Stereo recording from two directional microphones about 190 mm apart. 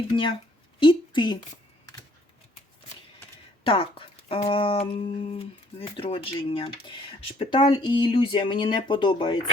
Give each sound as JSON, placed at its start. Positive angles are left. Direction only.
{"t": 0.1, "sound": "a woman's voice", "side_deg": 30}
{"t": 3.6, "sound": "speech", "side_deg": 30}